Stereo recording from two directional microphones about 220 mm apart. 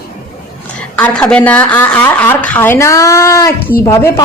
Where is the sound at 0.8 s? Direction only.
5° left (ahead or behind).